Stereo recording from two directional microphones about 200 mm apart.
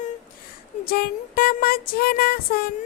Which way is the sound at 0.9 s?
50° left (ahead or behind).